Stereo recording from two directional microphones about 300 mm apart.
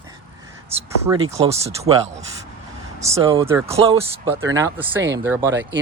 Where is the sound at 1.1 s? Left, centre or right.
Centre.